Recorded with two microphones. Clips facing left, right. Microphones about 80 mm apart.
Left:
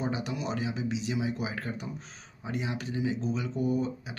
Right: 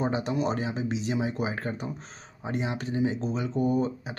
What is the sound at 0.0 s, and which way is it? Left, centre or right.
Speech, right.